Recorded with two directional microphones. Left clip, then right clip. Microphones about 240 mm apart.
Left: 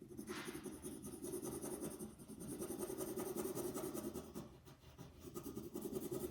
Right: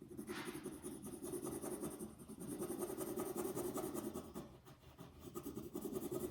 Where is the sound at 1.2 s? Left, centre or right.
Centre.